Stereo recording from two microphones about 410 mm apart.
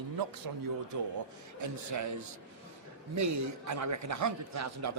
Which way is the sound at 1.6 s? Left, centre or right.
Right.